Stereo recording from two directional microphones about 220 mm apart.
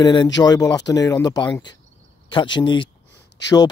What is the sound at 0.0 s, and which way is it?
Speech, 20° left (ahead or behind).